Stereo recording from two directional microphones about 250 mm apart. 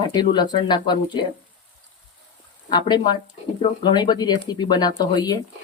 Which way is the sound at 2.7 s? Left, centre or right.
Centre.